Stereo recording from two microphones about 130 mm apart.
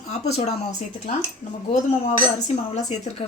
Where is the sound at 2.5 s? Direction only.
55° left (ahead or behind).